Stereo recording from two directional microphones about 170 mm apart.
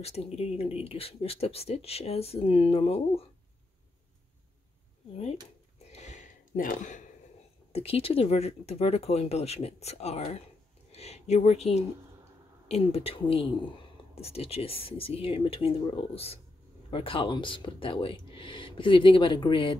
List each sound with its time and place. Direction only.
0.0 s speech: 40° left (ahead or behind)
5.9 s a sound: 40° left (ahead or behind)
7.7 s speech: 35° left (ahead or behind)